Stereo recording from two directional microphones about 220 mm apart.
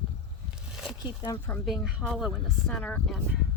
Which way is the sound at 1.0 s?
15° left (ahead or behind).